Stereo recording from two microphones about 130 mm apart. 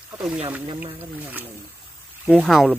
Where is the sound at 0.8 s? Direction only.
15° right (ahead or behind).